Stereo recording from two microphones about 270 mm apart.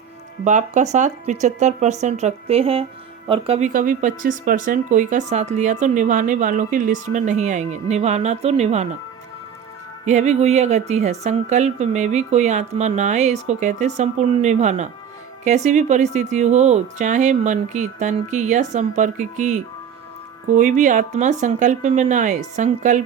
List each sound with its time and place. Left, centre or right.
0.4 s speech: right
10.1 s speech: right